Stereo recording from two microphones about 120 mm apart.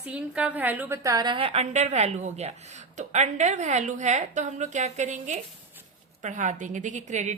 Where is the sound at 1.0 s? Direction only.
35° right (ahead or behind).